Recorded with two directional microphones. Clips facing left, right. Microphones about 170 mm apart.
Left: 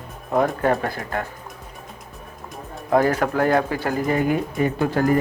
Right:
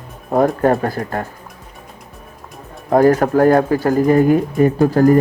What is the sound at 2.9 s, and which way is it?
Speech, 45° right (ahead or behind).